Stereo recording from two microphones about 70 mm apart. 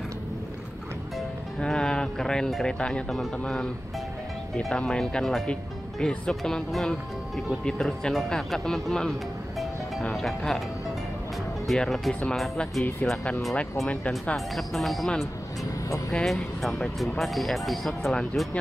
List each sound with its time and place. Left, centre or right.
1.6 s speech: centre
10.1 s speech: centre
11.6 s speech: centre
13.8 s speech: centre
14.3 s speech: centre
16.1 s speech: centre